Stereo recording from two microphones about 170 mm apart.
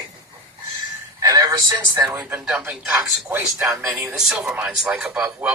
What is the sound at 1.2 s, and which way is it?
Speech, 20° right (ahead or behind).